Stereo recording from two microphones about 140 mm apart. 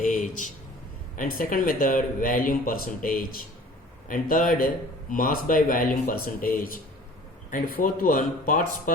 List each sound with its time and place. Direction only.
0.0 s speech: 75° left (ahead or behind)